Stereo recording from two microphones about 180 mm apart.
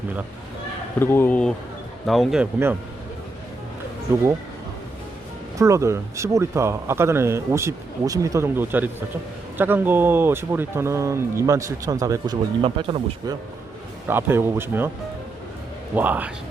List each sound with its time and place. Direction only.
0.9 s speech: 10° left (ahead or behind)
5.5 s speech: 15° right (ahead or behind)
14.1 s speech: 10° right (ahead or behind)
16.0 s speech: 10° right (ahead or behind)